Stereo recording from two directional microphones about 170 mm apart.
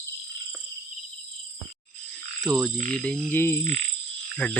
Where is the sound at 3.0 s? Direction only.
10° left (ahead or behind).